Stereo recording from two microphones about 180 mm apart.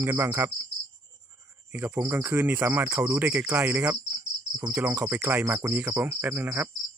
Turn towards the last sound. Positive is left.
turn(degrees=-15)  # may be behind; listen again after turning